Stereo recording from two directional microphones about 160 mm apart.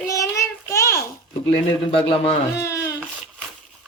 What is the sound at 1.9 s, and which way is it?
Speech, 35° left (ahead or behind).